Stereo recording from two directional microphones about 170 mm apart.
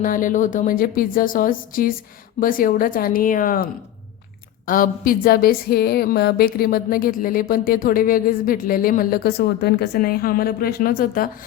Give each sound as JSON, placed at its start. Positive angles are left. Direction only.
{"t": 0.0, "sound": "a woman's voice", "side_deg": 50}